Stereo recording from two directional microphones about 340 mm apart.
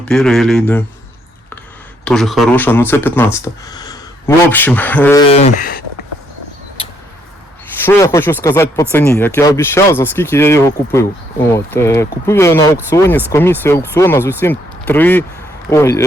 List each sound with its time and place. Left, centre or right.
0.0 s speech: centre
2.0 s speech: centre
5.4 s speech: left
7.9 s speech: centre